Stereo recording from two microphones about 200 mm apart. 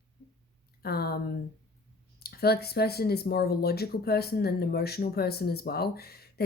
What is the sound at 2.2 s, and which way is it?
Speech, 50° left (ahead or behind).